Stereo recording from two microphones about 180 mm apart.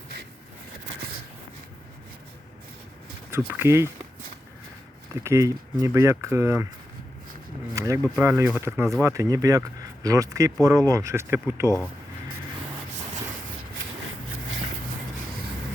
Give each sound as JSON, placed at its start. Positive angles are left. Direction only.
{"t": 3.3, "sound": "speech", "side_deg": -15}
{"t": 5.2, "sound": "speech", "side_deg": -15}
{"t": 7.7, "sound": "speech", "side_deg": -20}